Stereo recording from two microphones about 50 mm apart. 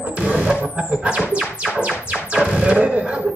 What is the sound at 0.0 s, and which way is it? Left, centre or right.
Music, right.